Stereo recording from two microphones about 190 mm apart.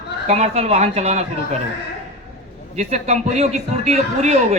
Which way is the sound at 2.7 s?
35° right (ahead or behind).